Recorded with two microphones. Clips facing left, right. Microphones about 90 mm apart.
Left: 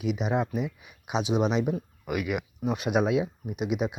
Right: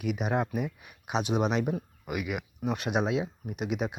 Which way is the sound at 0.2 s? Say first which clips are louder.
Left 2 dB; centre (ahead or behind).